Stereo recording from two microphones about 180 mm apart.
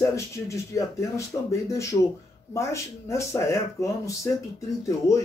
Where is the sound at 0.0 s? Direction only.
15° left (ahead or behind).